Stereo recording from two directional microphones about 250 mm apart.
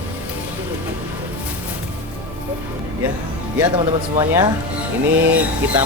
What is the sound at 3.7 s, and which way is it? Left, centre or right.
Speech, centre.